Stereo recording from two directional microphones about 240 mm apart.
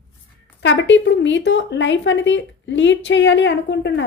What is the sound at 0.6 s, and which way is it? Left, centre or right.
Speech, left.